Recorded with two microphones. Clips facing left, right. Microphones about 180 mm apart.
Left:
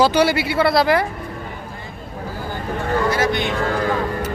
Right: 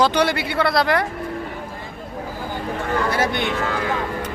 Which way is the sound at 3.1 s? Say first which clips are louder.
Left 2 dB; 55° right (ahead or behind).